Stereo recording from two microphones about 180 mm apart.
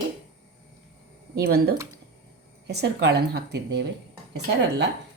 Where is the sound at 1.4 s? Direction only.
60° right (ahead or behind); by 3.8 s 75° right (ahead or behind).